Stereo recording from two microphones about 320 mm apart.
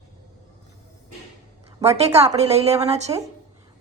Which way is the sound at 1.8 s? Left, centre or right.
Centre.